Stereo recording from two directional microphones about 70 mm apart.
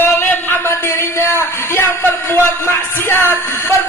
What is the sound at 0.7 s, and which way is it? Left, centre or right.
Speech, left.